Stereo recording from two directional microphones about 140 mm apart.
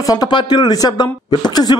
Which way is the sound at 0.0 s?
25° left (ahead or behind).